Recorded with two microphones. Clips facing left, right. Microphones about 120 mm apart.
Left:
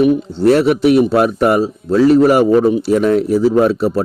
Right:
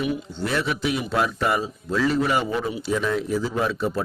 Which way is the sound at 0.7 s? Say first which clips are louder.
Left 14 dB; 60° left (ahead or behind).